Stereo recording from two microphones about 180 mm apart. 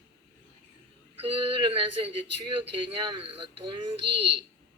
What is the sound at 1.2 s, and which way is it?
Speech, 30° right (ahead or behind).